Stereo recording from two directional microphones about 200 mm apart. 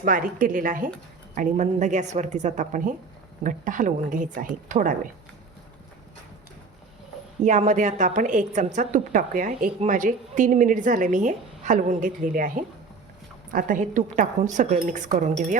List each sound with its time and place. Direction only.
0.0 s a woman's voice: 45° right (ahead or behind)
7.4 s a woman's voice: 35° right (ahead or behind)